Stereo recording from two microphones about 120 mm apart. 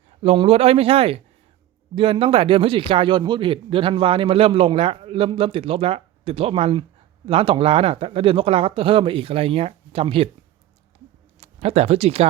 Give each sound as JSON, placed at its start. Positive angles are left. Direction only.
{"t": 0.2, "sound": "a man's voice", "side_deg": -55}
{"t": 11.3, "sound": "speech", "side_deg": -60}